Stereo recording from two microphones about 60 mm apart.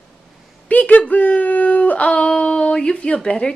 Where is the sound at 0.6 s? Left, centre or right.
Left.